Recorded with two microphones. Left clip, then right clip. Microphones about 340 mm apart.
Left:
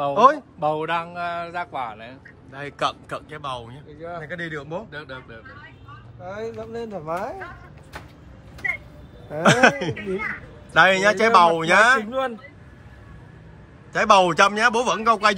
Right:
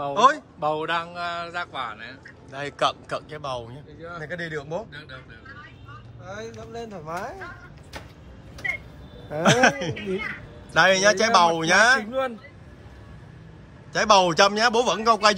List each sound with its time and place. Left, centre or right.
0.1 s speech: centre
0.6 s a man's voice: left
2.5 s speech: centre
6.2 s a man's voice: left
8.6 s vehicle: centre
9.3 s speech: centre
13.9 s speech: centre